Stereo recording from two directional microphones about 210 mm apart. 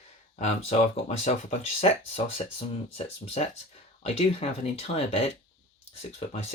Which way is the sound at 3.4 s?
30° left (ahead or behind).